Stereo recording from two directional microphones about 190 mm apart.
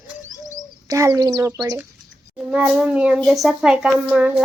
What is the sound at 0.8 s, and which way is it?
A child's voice, 15° right (ahead or behind).